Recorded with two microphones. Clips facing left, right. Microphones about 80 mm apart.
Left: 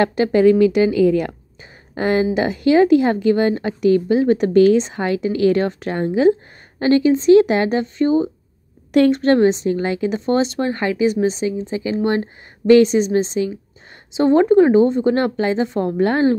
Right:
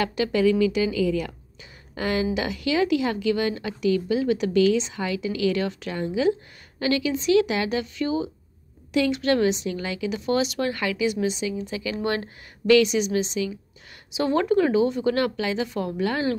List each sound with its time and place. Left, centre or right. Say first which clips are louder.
0.0 s a woman's voice: left 8 dB; left
8.9 s a woman's voice: left 8 dB; left
14.1 s a woman's voice: left 9 dB; left